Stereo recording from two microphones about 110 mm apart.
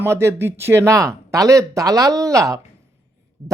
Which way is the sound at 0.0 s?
25° right (ahead or behind).